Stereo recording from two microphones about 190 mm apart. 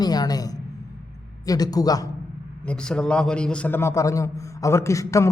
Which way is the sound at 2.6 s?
5° left (ahead or behind).